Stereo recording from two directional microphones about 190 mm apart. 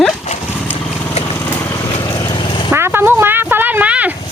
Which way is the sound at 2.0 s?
15° left (ahead or behind).